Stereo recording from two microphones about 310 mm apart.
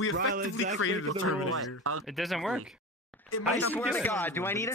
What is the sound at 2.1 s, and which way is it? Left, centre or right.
Speech, centre.